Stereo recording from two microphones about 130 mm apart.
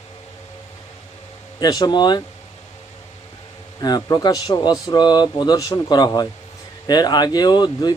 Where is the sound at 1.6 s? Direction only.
30° left (ahead or behind).